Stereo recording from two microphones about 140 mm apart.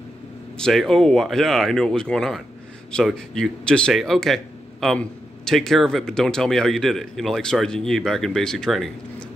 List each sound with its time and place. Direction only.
0.6 s speech: 5° left (ahead or behind)